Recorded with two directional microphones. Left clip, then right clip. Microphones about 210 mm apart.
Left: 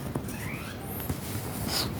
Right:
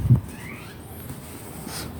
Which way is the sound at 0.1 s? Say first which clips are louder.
Right 1 dB; 20° left (ahead or behind).